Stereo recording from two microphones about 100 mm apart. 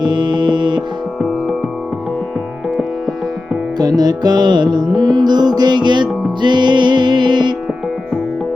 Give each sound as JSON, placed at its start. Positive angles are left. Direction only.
{"t": 0.0, "sound": "music", "side_deg": -45}
{"t": 3.8, "sound": "music", "side_deg": -40}